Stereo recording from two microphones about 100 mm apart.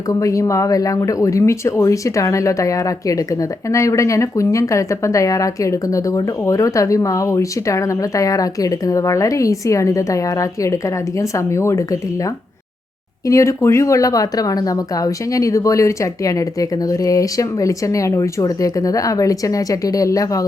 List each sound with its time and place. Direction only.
0.1 s speech: 35° left (ahead or behind)